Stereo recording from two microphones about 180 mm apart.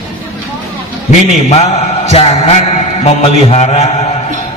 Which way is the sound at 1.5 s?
35° left (ahead or behind).